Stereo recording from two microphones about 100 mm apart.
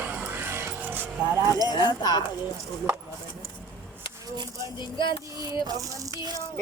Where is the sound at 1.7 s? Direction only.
45° left (ahead or behind).